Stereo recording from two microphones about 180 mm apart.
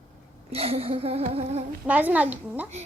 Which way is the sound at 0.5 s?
35° right (ahead or behind).